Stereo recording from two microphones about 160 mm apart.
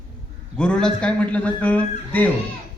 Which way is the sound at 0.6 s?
5° left (ahead or behind).